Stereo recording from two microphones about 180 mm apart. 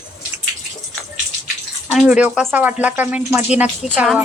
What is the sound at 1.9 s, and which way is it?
Speech, 5° right (ahead or behind).